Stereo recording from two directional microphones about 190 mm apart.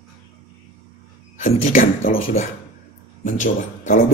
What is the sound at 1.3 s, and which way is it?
Speech, 40° left (ahead or behind).